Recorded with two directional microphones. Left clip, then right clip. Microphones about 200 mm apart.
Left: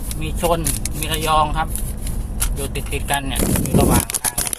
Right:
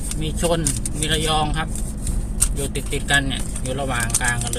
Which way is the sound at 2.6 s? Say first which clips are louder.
Even; centre (ahead or behind).